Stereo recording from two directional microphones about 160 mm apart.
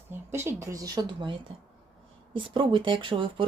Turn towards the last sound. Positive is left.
turn(degrees=-30)  # may be behind; listen again after turning